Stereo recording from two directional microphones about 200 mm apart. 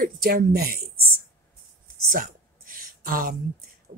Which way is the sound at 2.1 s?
45° right (ahead or behind).